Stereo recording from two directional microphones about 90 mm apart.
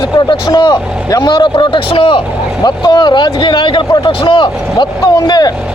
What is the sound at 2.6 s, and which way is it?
Speech, 50° left (ahead or behind).